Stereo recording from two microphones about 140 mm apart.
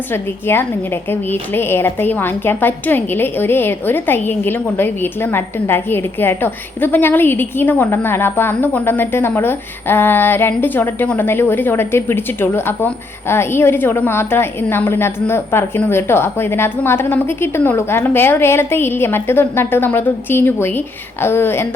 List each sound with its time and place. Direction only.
0.1 s a woman's voice: 15° left (ahead or behind)